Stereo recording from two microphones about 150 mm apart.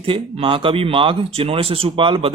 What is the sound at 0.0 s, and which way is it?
Speech, 35° right (ahead or behind).